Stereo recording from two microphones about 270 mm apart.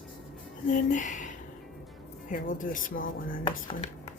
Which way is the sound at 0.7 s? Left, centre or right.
Left.